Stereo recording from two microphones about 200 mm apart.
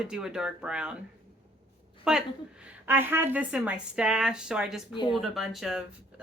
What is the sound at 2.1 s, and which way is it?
A woman's voice, 5° right (ahead or behind).